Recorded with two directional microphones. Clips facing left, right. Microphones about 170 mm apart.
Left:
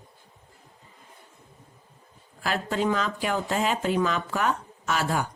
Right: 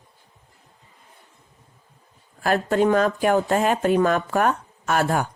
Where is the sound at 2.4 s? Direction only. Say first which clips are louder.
Right 7 dB; 50° right (ahead or behind).